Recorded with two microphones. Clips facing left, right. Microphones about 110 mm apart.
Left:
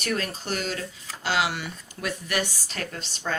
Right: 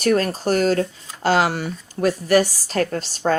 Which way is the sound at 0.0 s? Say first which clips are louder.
Right 11 dB; 40° right (ahead or behind).